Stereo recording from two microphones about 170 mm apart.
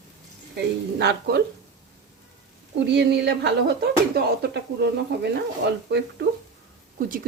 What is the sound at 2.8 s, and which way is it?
Speech, 90° right.